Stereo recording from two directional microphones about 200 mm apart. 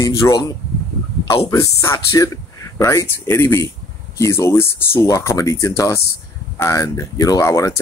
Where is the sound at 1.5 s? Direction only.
15° left (ahead or behind).